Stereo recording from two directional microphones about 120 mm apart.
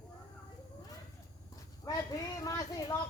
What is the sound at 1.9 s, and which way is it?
A man's voice, 25° left (ahead or behind).